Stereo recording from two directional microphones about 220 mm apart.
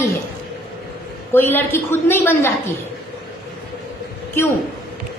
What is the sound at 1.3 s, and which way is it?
A woman's voice, 10° left (ahead or behind).